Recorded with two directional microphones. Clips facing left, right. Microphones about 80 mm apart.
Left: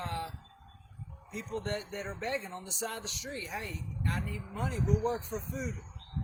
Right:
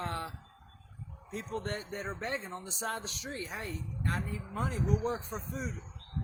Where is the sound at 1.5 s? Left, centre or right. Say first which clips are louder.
Left 2 dB; right.